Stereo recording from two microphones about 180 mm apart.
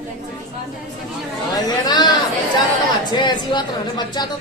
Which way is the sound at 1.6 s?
20° left (ahead or behind).